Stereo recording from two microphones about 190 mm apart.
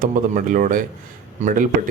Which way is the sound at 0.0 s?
45° right (ahead or behind).